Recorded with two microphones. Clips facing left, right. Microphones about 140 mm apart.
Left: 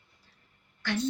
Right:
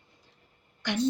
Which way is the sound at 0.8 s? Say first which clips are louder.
Even; 15° right (ahead or behind).